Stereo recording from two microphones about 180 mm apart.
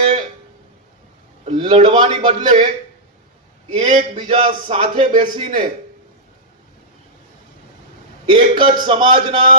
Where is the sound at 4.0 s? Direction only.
25° right (ahead or behind).